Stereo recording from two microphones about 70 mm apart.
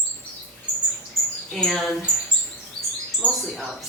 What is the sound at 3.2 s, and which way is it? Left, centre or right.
Speech, left.